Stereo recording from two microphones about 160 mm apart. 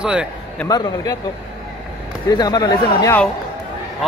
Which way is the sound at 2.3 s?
25° left (ahead or behind).